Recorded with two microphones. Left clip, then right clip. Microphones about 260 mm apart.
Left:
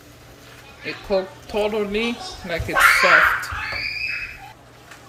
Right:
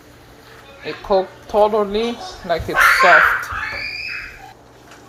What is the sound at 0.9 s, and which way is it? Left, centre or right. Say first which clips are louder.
Speech: right 5 dB; centre.